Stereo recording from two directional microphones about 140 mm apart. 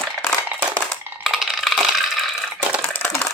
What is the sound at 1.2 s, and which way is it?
Coin, centre (ahead or behind).